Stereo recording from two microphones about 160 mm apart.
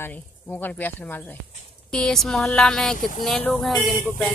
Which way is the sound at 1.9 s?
5° left (ahead or behind).